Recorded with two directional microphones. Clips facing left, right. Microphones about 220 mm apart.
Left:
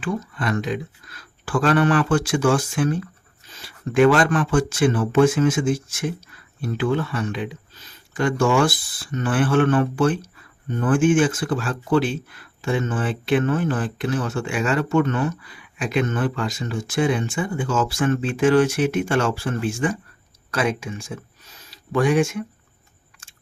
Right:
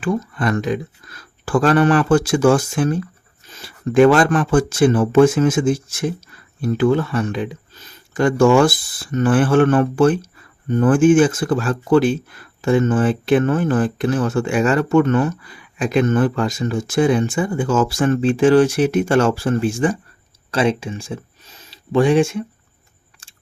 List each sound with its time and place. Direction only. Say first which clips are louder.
0.0 s speech: right 5 dB; 45° right (ahead or behind); by 22.4 s 30° right (ahead or behind)